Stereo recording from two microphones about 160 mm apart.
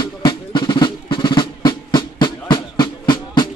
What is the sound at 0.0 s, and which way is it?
Music, 30° left (ahead or behind).